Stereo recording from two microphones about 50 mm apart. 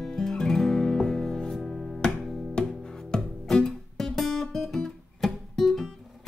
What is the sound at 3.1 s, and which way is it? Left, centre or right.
Music, centre.